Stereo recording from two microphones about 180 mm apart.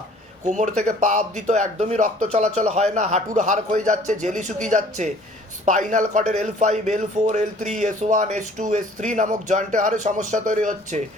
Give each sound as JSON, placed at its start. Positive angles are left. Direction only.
{"t": 0.4, "sound": "a man's voice", "side_deg": -40}